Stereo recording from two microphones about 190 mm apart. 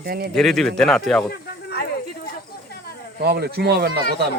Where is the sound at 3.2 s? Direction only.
60° right (ahead or behind).